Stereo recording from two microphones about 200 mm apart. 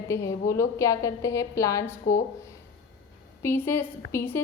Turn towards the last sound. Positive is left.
turn(degrees=10)  # may be behind; listen again after turning